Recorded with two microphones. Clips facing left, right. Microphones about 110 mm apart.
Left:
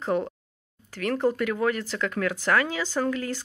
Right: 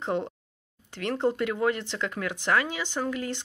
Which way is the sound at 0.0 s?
20° right (ahead or behind).